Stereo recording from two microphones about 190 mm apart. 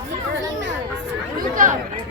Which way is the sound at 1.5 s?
45° right (ahead or behind).